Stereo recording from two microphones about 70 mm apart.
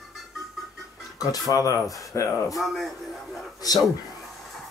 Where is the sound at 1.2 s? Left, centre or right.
Left.